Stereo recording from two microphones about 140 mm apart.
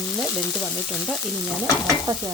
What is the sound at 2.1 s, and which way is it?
Stir, 20° right (ahead or behind).